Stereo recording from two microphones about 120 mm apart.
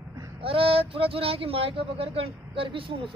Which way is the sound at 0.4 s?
50° right (ahead or behind).